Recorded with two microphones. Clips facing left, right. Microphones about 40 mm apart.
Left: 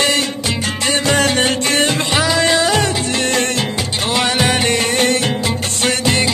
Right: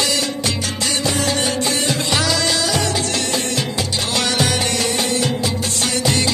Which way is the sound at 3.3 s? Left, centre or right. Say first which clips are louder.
Left 4 dB; left.